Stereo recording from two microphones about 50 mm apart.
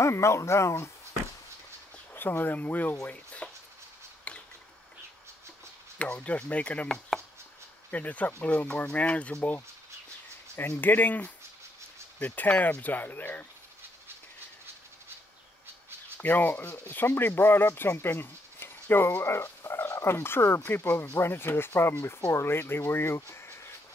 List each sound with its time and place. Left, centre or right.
0.0 s speech: left
2.1 s speech: left
3.4 s a sound: left
5.9 s speech: left
7.9 s speech: left
10.7 s speech: left
16.2 s speech: left
19.2 s speech: left
20.6 s speech: left